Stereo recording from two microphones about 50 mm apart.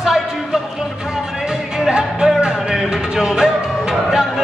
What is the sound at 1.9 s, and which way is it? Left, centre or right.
Music, centre.